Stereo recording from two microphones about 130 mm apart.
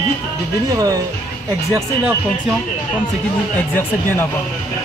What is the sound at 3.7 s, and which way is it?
Speech, 15° left (ahead or behind).